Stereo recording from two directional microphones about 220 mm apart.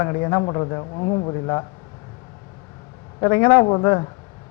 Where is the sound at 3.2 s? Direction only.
15° left (ahead or behind).